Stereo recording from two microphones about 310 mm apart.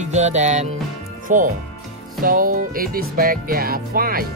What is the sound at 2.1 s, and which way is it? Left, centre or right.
Music, right.